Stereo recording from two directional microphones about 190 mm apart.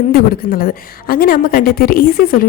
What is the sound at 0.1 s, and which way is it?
A woman's voice, 50° left (ahead or behind).